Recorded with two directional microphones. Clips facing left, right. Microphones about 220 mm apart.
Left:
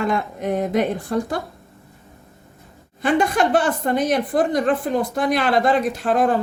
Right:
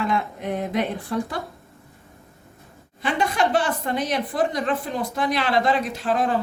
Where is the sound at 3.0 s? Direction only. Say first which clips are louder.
Left 4 dB; 50° left (ahead or behind).